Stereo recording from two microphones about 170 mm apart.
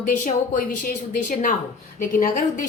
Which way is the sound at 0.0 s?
50° left (ahead or behind).